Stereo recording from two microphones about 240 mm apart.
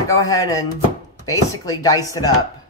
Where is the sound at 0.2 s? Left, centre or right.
Centre.